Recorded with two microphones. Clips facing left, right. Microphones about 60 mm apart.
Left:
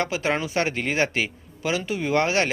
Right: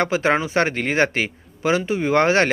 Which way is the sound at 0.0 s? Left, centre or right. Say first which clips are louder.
Right 5 dB; right.